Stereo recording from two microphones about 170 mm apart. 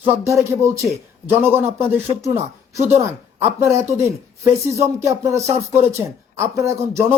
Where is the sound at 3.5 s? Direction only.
15° right (ahead or behind).